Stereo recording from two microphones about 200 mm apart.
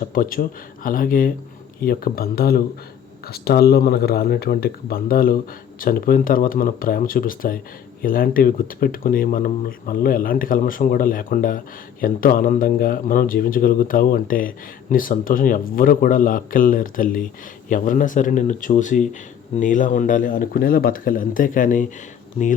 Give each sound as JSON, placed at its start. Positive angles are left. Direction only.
{"t": 0.0, "sound": "a man's voice", "side_deg": 45}